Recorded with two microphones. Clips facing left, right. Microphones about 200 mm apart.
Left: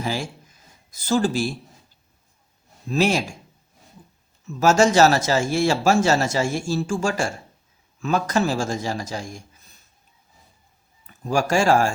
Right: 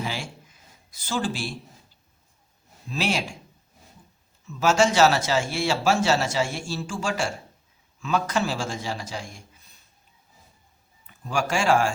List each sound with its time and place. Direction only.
0.0 s a sound: 40° left (ahead or behind)
0.9 s speech: 40° left (ahead or behind)
2.9 s speech: 45° left (ahead or behind)
4.4 s speech: 45° left (ahead or behind)
11.0 s speech: 45° left (ahead or behind)